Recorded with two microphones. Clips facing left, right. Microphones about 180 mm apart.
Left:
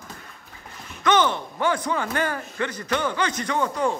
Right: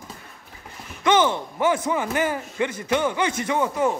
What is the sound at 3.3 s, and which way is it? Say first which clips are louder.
Speech: right 3 dB; 25° right (ahead or behind).